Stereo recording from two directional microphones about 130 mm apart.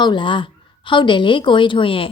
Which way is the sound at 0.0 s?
35° left (ahead or behind).